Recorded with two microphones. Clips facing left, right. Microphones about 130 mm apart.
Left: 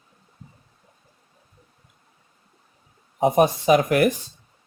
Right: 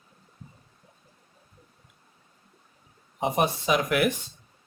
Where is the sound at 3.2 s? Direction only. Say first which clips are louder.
Left 7 dB; 45° left (ahead or behind).